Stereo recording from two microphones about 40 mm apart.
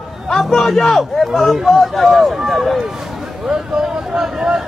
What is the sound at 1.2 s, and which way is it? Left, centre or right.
Speech, centre.